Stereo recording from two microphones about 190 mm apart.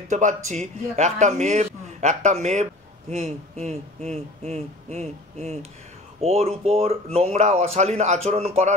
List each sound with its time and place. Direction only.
0.1 s a man's voice: 40° right (ahead or behind)